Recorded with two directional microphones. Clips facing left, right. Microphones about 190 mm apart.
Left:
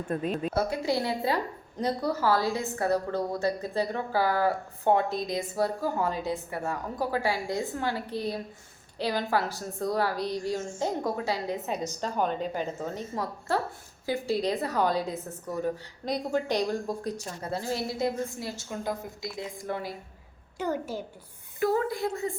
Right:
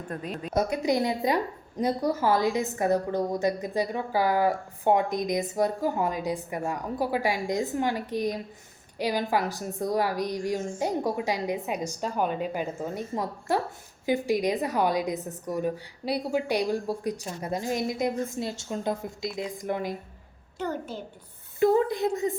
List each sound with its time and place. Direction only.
0.1 s a woman's voice: 25° left (ahead or behind)
0.5 s a woman's voice: 15° right (ahead or behind)
20.6 s a child's voice: 10° left (ahead or behind)
21.6 s a woman's voice: 20° right (ahead or behind)